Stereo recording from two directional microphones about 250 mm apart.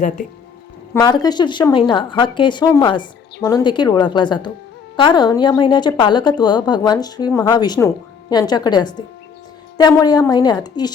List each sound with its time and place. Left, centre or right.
0.9 s speech: centre